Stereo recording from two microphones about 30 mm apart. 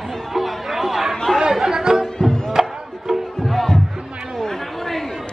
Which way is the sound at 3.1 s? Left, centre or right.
Centre.